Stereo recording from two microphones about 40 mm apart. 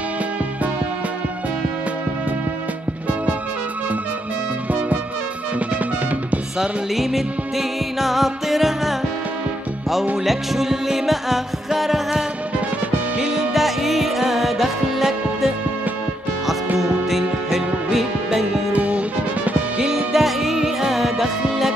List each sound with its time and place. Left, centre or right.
4.6 s music: right
7.0 s music: centre
10.1 s music: centre
13.2 s music: centre
13.5 s music: centre
16.7 s music: centre
18.7 s music: right
20.1 s music: centre